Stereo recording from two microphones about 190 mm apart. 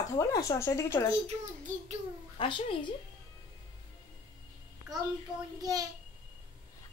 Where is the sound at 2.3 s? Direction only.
25° left (ahead or behind).